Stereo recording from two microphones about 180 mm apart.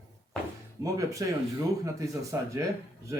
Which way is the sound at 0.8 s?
20° right (ahead or behind).